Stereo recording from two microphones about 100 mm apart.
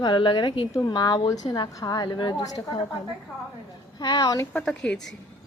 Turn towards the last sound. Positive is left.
turn(degrees=10)  # may be behind; listen again after turning